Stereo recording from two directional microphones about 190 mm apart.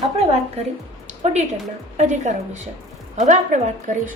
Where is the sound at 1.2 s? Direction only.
35° right (ahead or behind).